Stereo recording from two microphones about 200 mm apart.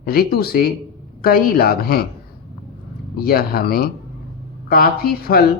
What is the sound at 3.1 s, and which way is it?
Speech, 50° left (ahead or behind).